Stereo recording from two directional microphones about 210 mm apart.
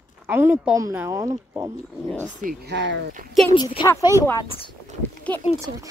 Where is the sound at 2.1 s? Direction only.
5° left (ahead or behind).